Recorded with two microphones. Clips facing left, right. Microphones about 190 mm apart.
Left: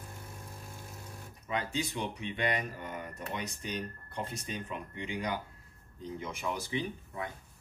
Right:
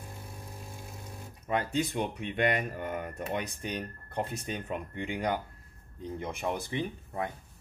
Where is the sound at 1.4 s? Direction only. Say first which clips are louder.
Right 5 dB; 55° right (ahead or behind).